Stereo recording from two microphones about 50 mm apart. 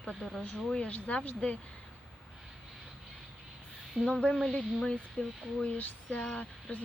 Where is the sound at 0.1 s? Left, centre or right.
Centre.